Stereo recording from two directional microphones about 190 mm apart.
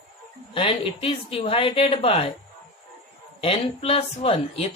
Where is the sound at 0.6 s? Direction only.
30° left (ahead or behind).